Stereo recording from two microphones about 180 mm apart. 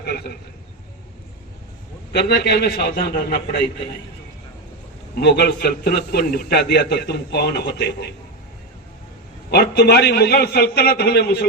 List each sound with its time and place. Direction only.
0.0 s a man's voice: 60° left (ahead or behind)
2.1 s a man's voice: 65° left (ahead or behind)
5.2 s a man's voice: 65° left (ahead or behind)
9.5 s a man's voice: 65° left (ahead or behind)